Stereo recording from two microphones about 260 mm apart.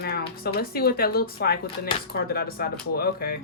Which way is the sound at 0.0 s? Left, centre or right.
Left.